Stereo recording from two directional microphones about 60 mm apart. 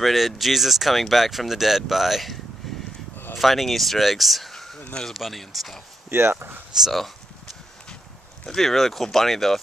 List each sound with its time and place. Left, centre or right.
0.0 s speech: centre
2.6 s a sound: centre
3.3 s speech: centre
6.0 s speech: right
6.8 s speech: centre
8.5 s speech: centre